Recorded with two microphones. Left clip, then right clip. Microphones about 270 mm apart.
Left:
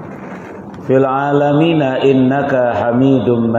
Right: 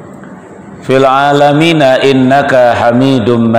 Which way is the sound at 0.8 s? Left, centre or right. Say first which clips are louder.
Right 6 dB; right.